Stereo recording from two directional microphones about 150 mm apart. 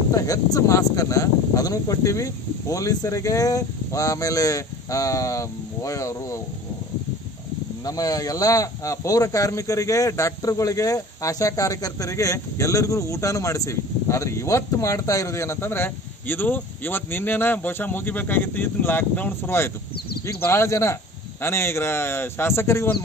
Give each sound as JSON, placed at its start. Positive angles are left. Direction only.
{"t": 0.1, "sound": "speech", "side_deg": 25}
{"t": 7.8, "sound": "a man's voice", "side_deg": 25}